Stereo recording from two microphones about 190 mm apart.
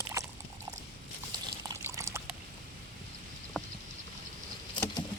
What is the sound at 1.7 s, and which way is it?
Pour, 15° right (ahead or behind).